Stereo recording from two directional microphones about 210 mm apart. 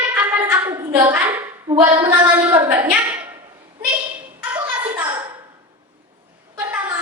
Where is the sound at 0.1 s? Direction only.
10° right (ahead or behind).